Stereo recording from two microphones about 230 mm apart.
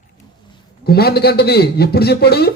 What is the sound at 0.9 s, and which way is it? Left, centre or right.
A man's voice, left.